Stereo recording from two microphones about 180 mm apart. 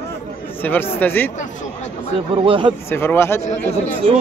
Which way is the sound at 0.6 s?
10° left (ahead or behind).